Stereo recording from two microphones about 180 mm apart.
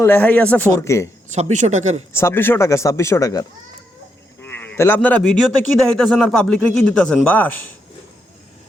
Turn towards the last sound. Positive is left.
turn(degrees=10)  # may be behind; listen again after turning